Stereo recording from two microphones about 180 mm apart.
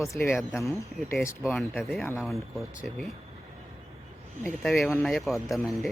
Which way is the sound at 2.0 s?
15° left (ahead or behind).